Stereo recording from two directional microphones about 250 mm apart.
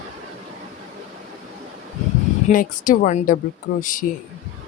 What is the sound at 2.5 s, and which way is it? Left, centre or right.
A woman's voice, left.